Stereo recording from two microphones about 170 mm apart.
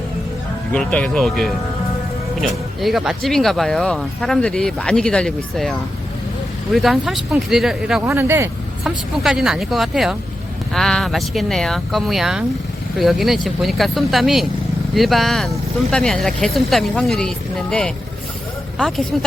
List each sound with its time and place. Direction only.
0.7 s speech: 5° left (ahead or behind)
6.7 s speech: centre (ahead or behind)
8.0 s speech: 15° right (ahead or behind)
8.8 s speech: centre (ahead or behind)